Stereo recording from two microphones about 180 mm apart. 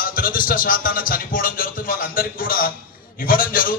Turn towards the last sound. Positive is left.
turn(degrees=50)  # may be behind; listen again after turning